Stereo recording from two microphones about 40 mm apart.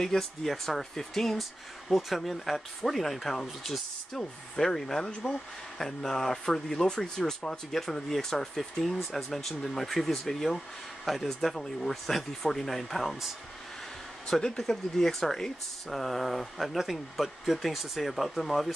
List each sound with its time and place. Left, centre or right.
0.0 s speech: centre
5.2 s speech: centre
5.8 s speech: centre
14.2 s speech: centre